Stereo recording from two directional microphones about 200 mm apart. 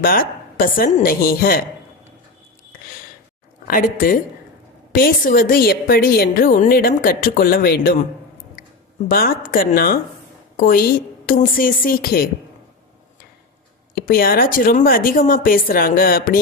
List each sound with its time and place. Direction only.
0.0 s a woman's voice: 45° left (ahead or behind)
3.7 s a woman's voice: 45° left (ahead or behind)
9.0 s a woman's voice: 45° left (ahead or behind)
14.1 s a woman's voice: 45° left (ahead or behind)